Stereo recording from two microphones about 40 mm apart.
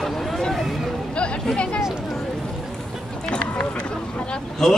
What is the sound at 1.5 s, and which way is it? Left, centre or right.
Speech, left.